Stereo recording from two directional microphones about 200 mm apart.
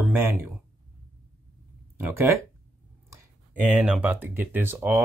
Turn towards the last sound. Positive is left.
turn(degrees=-10)  # may be behind; listen again after turning